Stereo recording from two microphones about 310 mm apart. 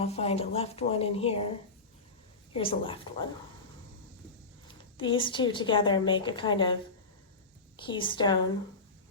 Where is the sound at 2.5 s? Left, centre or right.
Centre.